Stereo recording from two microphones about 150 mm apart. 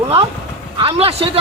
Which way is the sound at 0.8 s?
40° right (ahead or behind).